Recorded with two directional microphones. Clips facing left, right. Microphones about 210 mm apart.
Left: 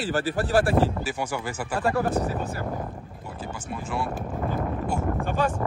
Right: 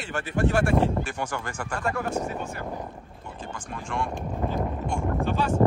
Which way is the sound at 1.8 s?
35° left (ahead or behind).